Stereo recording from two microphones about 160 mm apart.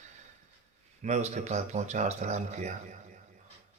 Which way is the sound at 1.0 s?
45° right (ahead or behind).